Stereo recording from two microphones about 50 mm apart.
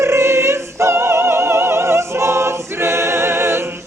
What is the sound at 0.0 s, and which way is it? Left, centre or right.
Opera, right.